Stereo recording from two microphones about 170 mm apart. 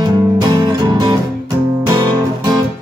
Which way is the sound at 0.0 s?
25° right (ahead or behind).